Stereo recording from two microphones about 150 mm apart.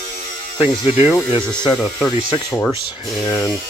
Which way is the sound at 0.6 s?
45° left (ahead or behind).